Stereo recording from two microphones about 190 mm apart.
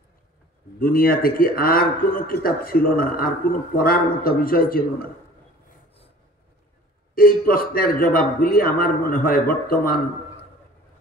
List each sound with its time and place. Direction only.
0.7 s a man's voice: 50° left (ahead or behind)
7.2 s a man's voice: 50° left (ahead or behind)